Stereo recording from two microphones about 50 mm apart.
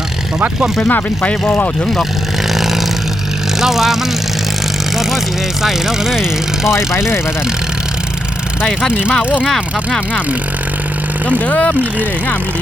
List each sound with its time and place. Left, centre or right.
0.9 s speech: left
3.6 s speech: centre
5.6 s speech: centre
11.3 s speech: left